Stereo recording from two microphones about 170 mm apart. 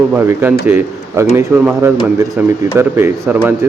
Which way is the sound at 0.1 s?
10° right (ahead or behind).